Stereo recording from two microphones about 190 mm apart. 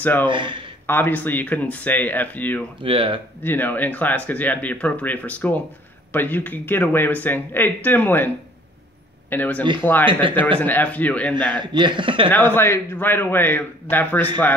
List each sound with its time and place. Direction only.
0.0 s speech: 10° left (ahead or behind)
0.3 s a man's voice: 25° right (ahead or behind)
0.8 s speech: 10° left (ahead or behind)
2.8 s a man's voice: 25° right (ahead or behind)
3.4 s speech: 10° left (ahead or behind)
9.3 s speech: 10° left (ahead or behind)
10.0 s a man's voice: 25° right (ahead or behind)
10.6 s speech: 10° left (ahead or behind)
11.5 s a man's voice: 25° right (ahead or behind)
12.3 s speech: 10° left (ahead or behind)